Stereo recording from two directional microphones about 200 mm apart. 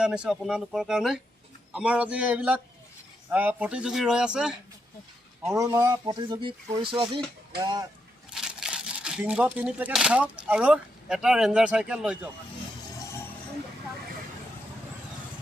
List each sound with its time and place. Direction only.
0.0 s speech: 5° right (ahead or behind)
5.5 s speech: 15° right (ahead or behind)
8.3 s speech: 5° right (ahead or behind)